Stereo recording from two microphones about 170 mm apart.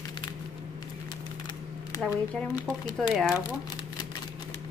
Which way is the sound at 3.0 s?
5° right (ahead or behind).